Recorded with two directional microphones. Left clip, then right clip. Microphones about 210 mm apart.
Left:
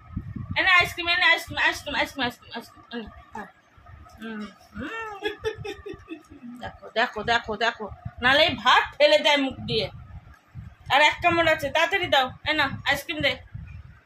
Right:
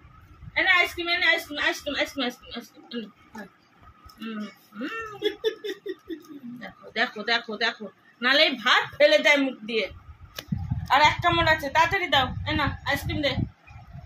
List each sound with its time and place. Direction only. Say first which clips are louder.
0.5 s a woman's voice: left 1 dB; 30° left (ahead or behind)
4.7 s speech: even; 30° left (ahead or behind)
6.6 s a woman's voice: left 2 dB; 30° left (ahead or behind)
10.9 s a woman's voice: even; 15° left (ahead or behind)